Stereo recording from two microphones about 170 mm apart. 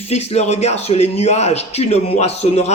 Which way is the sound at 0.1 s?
40° left (ahead or behind).